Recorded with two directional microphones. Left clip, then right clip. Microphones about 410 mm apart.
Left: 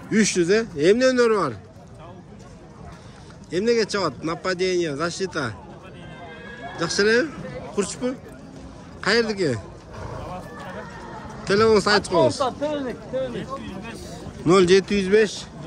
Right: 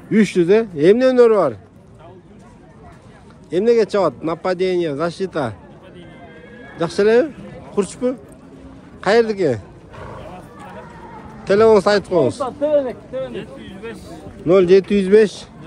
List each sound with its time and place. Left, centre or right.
0.1 s speech: centre
3.4 s speech: centre
6.8 s speech: centre
11.4 s speech: centre
12.4 s speech: centre
12.8 s speech: centre
14.4 s speech: centre